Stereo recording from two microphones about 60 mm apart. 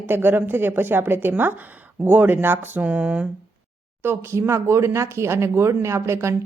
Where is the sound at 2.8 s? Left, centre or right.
Right.